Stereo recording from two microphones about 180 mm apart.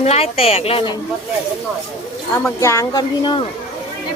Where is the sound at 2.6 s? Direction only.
15° left (ahead or behind).